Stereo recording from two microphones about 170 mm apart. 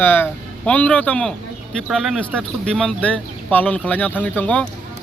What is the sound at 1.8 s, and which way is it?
Speech, 5° right (ahead or behind).